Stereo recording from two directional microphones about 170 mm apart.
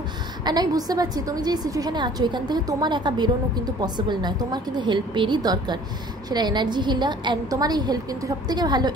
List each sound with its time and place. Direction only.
0.5 s a woman's voice: 25° right (ahead or behind)